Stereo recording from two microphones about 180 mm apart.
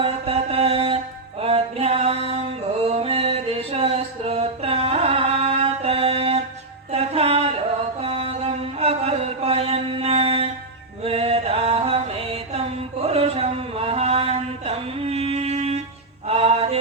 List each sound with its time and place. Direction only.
0.0 s mantra: 30° right (ahead or behind)
1.4 s music: 35° right (ahead or behind)
8.0 s mantra: 35° right (ahead or behind)
11.0 s music: 35° right (ahead or behind)
13.1 s mantra: 35° right (ahead or behind)
16.2 s music: 35° right (ahead or behind)